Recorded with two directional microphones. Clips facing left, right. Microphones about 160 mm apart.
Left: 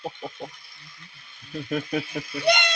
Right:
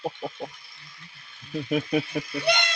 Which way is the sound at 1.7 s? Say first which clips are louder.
Right 2 dB; 20° right (ahead or behind).